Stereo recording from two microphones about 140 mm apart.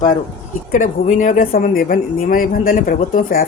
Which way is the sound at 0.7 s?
65° left (ahead or behind).